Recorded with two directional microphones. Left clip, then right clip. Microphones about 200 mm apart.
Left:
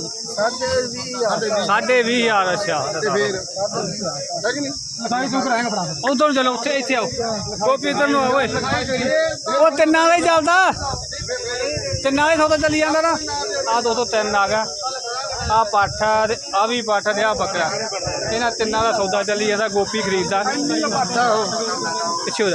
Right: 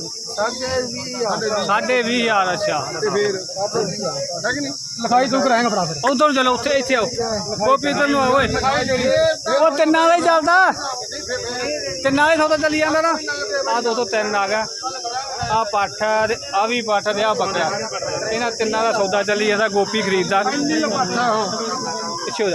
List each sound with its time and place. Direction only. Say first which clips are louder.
1.6 s speech: left 2 dB; 5° left (ahead or behind)
5.0 s speech: right 5 dB; 50° right (ahead or behind)
6.1 s speech: right 1 dB; 10° right (ahead or behind)
8.6 s speech: right 3 dB; 45° right (ahead or behind)
9.6 s speech: left 2 dB; 5° right (ahead or behind)
12.0 s speech: right 1 dB; 10° right (ahead or behind)
21.2 s speech: left 2 dB; 25° right (ahead or behind)